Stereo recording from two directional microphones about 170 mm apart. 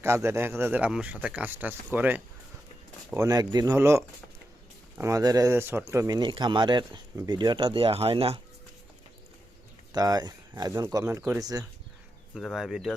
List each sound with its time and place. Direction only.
0.0 s speech: 15° right (ahead or behind)
3.2 s speech: 20° right (ahead or behind)
9.9 s speech: 20° right (ahead or behind)
12.3 s speech: centre (ahead or behind)